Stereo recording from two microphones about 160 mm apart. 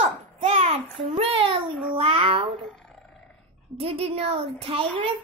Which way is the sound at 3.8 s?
35° right (ahead or behind).